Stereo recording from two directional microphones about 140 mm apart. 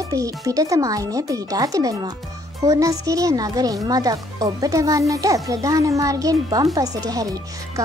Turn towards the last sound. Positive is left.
turn(degrees=-25)  # may be behind; listen again after turning